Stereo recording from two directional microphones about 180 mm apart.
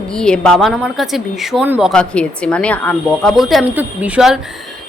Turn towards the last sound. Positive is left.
turn(degrees=-5)  # may be behind; listen again after turning